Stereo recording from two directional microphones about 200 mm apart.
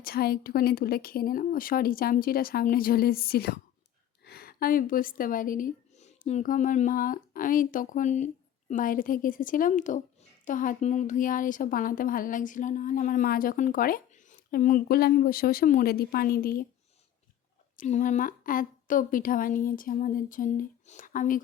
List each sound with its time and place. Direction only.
0.0 s a woman's voice: 50° left (ahead or behind)
17.7 s a woman's voice: 40° left (ahead or behind)